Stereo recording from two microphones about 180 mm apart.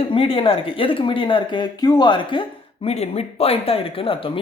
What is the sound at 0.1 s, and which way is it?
Speech, 30° left (ahead or behind).